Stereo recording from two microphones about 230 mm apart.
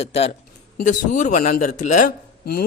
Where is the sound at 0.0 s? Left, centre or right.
Left.